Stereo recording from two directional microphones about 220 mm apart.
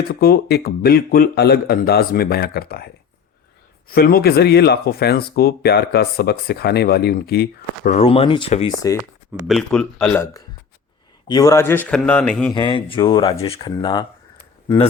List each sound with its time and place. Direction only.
0.1 s speech: 45° left (ahead or behind)
7.9 s speech: 30° left (ahead or behind)
9.5 s a man's voice: centre (ahead or behind)
12.5 s speech: 20° left (ahead or behind)